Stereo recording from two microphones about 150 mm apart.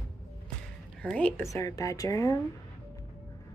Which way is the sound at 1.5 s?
20° left (ahead or behind).